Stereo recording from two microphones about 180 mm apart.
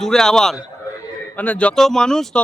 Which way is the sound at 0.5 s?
20° left (ahead or behind).